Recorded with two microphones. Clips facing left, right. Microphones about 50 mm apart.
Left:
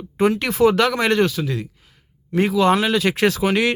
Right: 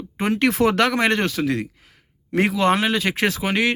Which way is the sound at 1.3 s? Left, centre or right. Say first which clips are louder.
Right 2 dB; right.